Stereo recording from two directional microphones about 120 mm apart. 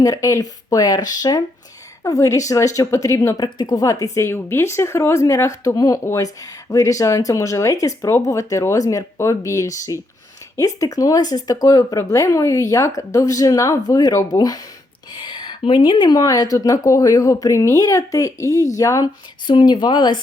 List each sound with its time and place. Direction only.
0.0 s speech: 30° left (ahead or behind)
19.5 s speech: 40° left (ahead or behind)